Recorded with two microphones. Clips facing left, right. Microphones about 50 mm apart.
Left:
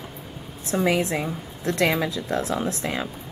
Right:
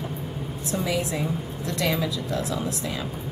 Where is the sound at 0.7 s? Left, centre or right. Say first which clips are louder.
Left 5 dB; left.